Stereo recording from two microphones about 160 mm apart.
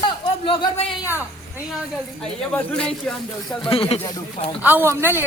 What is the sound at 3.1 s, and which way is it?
Speech, 5° left (ahead or behind).